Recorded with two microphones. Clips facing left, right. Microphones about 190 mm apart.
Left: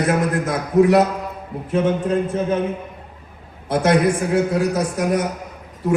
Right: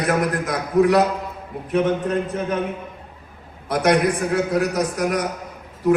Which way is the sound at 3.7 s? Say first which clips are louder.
Left 1 dB; 25° left (ahead or behind).